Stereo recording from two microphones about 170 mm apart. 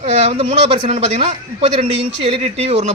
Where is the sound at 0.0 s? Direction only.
40° right (ahead or behind).